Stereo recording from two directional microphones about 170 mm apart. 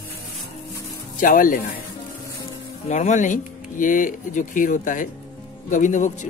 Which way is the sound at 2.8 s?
45° left (ahead or behind).